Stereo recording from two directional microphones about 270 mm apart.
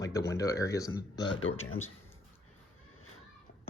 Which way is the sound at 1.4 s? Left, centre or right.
Left.